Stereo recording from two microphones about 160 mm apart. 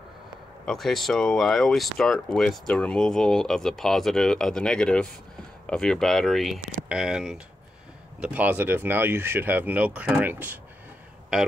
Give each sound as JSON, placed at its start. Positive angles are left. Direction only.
{"t": 0.7, "sound": "speech", "side_deg": 0}